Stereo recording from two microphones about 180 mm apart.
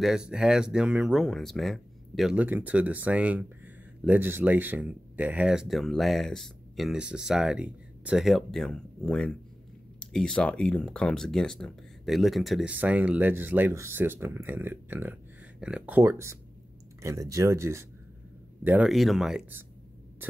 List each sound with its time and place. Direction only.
0.0 s speech: 5° right (ahead or behind)